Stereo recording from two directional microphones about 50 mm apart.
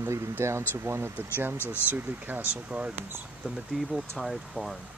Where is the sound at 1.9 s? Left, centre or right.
Right.